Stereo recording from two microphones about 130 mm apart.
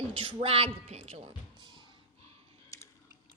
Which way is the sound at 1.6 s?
35° right (ahead or behind).